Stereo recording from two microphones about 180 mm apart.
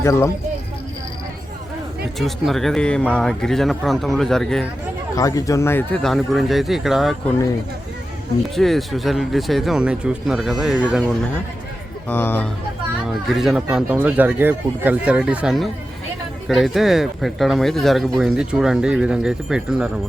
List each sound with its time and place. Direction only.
0.0 s speech: 15° left (ahead or behind)
2.1 s speech: centre (ahead or behind)
5.1 s speech: 20° left (ahead or behind); by 7.3 s centre (ahead or behind)
8.5 s speech: centre (ahead or behind)
12.0 s speech: 10° left (ahead or behind)
13.2 s speech: centre (ahead or behind)